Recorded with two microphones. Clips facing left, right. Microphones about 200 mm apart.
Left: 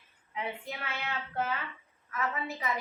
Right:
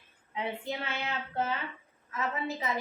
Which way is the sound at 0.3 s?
25° right (ahead or behind).